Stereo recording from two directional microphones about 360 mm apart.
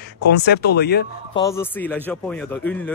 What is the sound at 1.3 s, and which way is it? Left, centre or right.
Speech, centre.